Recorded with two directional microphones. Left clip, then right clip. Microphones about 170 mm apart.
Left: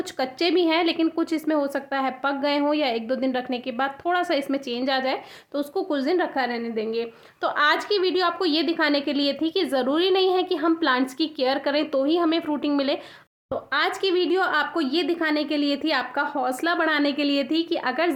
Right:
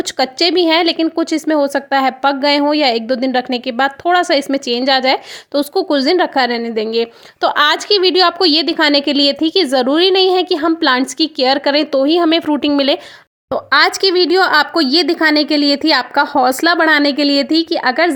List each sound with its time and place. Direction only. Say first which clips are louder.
0.0 s a woman's voice: right 10 dB; 45° right (ahead or behind)
13.5 s a woman's voice: right 12 dB; 65° right (ahead or behind)